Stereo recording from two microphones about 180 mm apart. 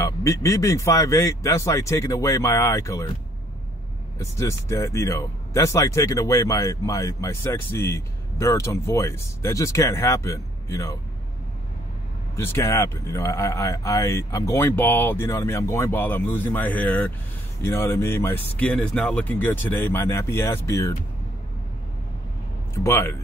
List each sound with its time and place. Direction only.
0.0 s speech: 15° left (ahead or behind)
4.2 s speech: 15° left (ahead or behind)
12.4 s speech: 15° left (ahead or behind)
22.8 s speech: 15° left (ahead or behind)